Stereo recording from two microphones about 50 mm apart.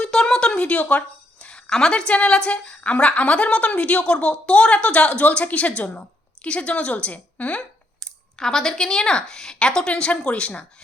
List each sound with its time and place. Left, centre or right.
0.0 s a sound: centre
1.7 s a woman's voice: centre
7.9 s speech: centre